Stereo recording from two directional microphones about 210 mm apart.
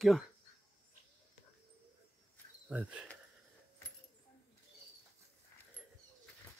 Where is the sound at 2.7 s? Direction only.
5° right (ahead or behind).